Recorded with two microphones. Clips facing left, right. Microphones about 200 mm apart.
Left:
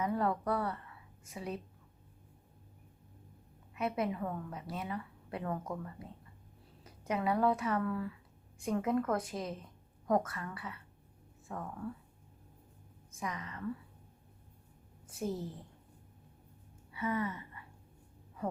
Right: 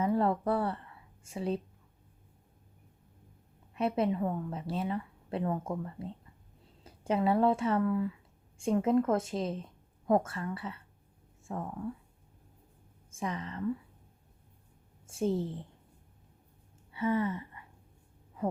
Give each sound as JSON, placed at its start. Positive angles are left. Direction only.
{"t": 0.0, "sound": "a woman's voice", "side_deg": -30}
{"t": 3.8, "sound": "a woman's voice", "side_deg": -30}
{"t": 13.1, "sound": "a woman's voice", "side_deg": -30}
{"t": 15.0, "sound": "a woman's voice", "side_deg": -25}
{"t": 16.9, "sound": "a sound", "side_deg": -30}